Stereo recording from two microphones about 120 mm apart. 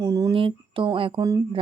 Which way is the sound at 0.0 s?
30° right (ahead or behind).